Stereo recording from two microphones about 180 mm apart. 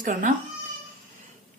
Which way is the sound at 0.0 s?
50° right (ahead or behind).